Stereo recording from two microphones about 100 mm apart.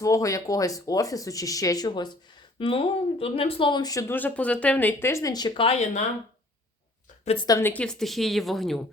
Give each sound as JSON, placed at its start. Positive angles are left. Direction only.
{"t": 0.0, "sound": "speech", "side_deg": 35}
{"t": 1.9, "sound": "speech", "side_deg": 50}
{"t": 4.1, "sound": "speech", "side_deg": 15}
{"t": 7.6, "sound": "a woman's voice", "side_deg": 15}